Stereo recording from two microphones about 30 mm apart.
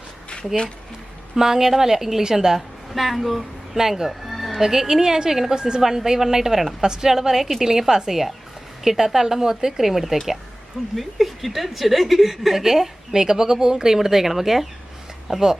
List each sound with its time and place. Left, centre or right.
0.3 s speech: left
1.4 s speech: centre
2.6 s a woman's voice: centre
3.8 s speech: centre
4.3 s music: centre
4.6 s speech: centre
5.5 s a woman's voice: right
5.8 s a woman's voice: centre